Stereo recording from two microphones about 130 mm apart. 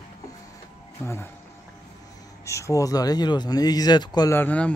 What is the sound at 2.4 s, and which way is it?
Speech, 25° left (ahead or behind).